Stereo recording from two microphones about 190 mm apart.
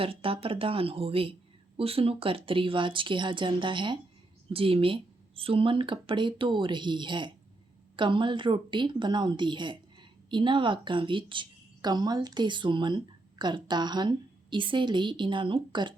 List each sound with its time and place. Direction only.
0.0 s a woman's voice: 30° right (ahead or behind)